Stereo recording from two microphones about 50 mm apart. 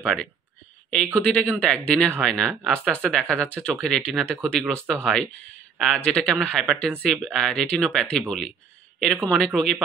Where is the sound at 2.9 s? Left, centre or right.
Centre.